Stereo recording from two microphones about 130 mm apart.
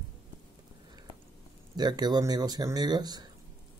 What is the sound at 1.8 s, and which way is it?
Speech, 30° right (ahead or behind).